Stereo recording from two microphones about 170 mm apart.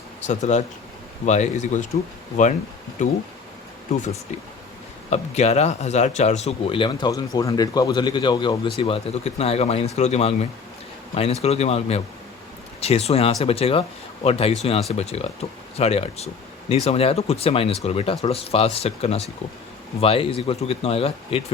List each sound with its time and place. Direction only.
0.3 s speech: 45° left (ahead or behind)
3.0 s speech: 45° left (ahead or behind)
5.1 s speech: 40° left (ahead or behind)